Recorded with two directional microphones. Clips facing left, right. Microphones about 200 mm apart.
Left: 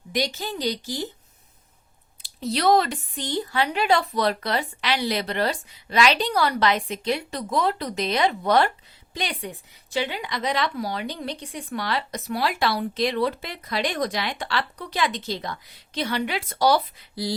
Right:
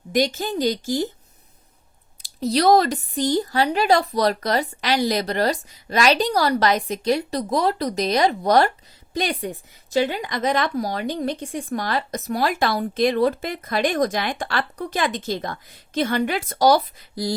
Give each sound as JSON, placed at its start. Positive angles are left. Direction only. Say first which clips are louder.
{"t": 0.1, "sound": "a woman's voice", "louder": "right 6 dB", "side_deg": -50}
{"t": 2.2, "sound": "a woman's voice", "louder": "right 4 dB", "side_deg": -40}